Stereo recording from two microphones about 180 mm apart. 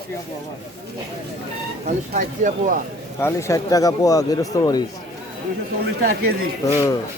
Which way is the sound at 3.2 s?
15° left (ahead or behind).